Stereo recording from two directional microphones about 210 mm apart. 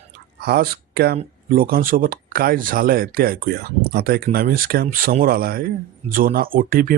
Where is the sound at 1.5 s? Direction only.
45° right (ahead or behind).